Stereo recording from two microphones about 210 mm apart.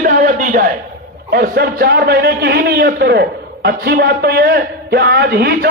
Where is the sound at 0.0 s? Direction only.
40° right (ahead or behind).